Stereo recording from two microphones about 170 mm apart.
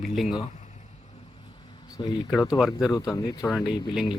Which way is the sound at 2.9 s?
20° left (ahead or behind).